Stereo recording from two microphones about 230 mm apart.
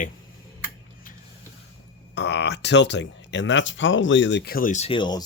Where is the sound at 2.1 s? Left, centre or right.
Left; by 5.2 s centre.